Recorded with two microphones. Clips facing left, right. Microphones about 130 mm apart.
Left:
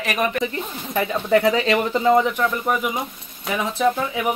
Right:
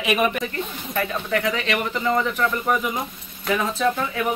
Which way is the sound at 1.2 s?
25° left (ahead or behind).